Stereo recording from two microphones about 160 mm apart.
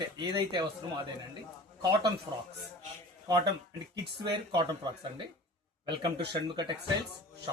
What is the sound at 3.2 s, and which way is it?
Speech, 25° right (ahead or behind).